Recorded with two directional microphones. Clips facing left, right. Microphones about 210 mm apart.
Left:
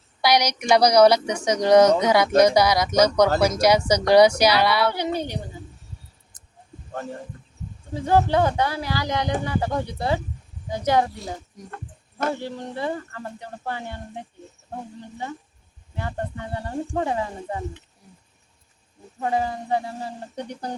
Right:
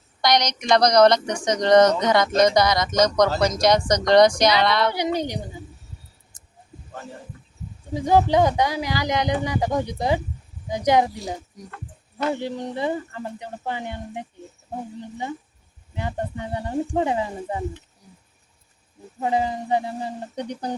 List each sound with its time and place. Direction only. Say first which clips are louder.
0.2 s speech: left 1 dB; 10° left (ahead or behind)
4.9 s speech: right 1 dB; 15° right (ahead or behind)
7.9 s speech: right 2 dB; 15° right (ahead or behind)
12.3 s speech: right 3 dB; 15° right (ahead or behind)
16.0 s speech: right 2 dB; 15° right (ahead or behind)
19.2 s speech: right 1 dB; 15° right (ahead or behind)